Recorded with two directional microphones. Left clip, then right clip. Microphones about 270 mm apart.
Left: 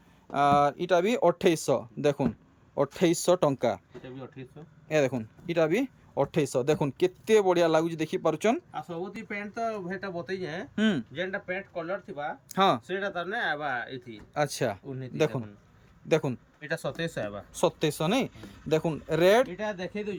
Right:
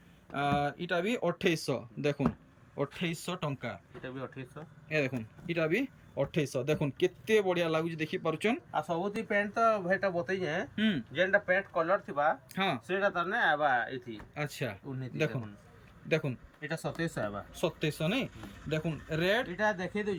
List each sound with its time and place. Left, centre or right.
0.3 s speech: centre
4.0 s speech: centre
4.9 s speech: centre
8.7 s speech: centre
10.8 s speech: centre
11.2 s speech: centre
12.5 s speech: centre
19.5 s speech: centre